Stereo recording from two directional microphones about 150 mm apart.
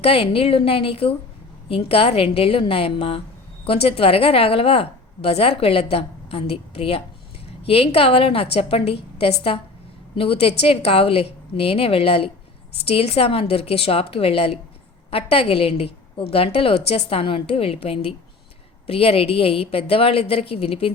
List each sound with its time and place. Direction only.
0.0 s a woman's voice: 40° left (ahead or behind)